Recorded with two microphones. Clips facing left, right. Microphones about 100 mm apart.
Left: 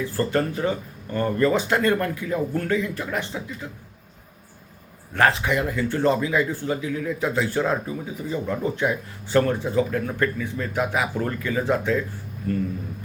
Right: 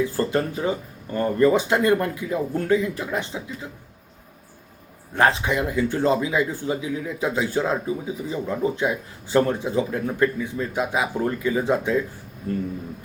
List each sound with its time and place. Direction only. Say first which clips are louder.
0.0 s speech: right 1 dB; 15° right (ahead or behind)
5.1 s speech: even; 20° right (ahead or behind)